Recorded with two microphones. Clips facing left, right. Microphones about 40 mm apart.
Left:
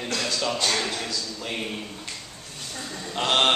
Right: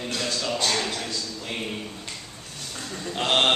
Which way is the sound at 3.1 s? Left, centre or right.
Centre.